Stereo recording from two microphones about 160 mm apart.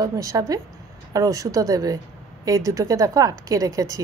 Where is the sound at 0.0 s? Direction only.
20° right (ahead or behind).